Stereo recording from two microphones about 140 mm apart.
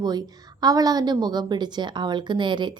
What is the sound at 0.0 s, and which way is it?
A woman's voice, 30° right (ahead or behind).